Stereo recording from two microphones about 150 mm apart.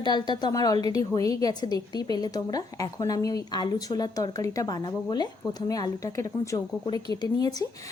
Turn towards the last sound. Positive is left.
turn(degrees=25)  # may be behind; listen again after turning